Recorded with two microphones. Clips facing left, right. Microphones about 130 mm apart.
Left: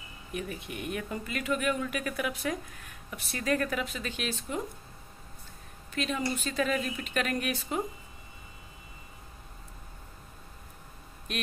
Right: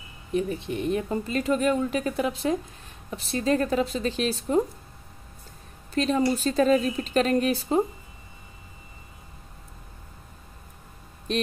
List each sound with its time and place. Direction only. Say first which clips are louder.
0.3 s speech: right 10 dB; 30° right (ahead or behind)
5.9 s a woman's voice: right 8 dB; 35° right (ahead or behind)
11.3 s speech: right 9 dB; 30° right (ahead or behind)